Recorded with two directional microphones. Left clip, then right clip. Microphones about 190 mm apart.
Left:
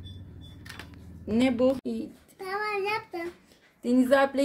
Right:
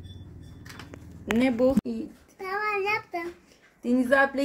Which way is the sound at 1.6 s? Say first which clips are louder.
Right 2 dB; 10° right (ahead or behind).